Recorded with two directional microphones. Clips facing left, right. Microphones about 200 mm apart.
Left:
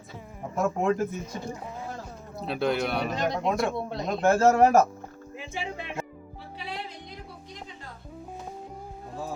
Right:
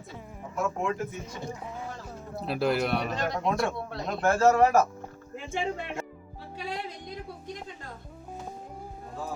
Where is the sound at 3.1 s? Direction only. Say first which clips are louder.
Left 2 dB; 15° left (ahead or behind).